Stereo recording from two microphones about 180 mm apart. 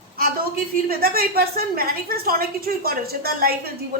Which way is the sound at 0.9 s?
55° right (ahead or behind).